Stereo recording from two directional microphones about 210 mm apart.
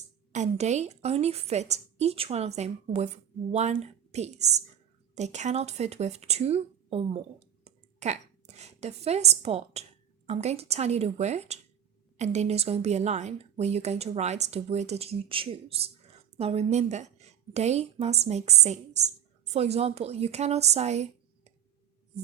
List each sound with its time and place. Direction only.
0.3 s speech: 35° right (ahead or behind)